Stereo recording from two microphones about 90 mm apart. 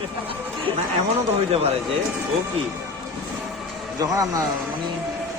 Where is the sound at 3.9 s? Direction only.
40° right (ahead or behind).